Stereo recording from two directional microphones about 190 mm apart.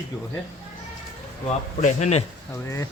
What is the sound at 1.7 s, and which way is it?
Speech, 35° left (ahead or behind).